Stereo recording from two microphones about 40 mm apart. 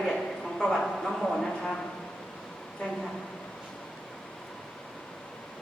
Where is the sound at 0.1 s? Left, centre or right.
Centre.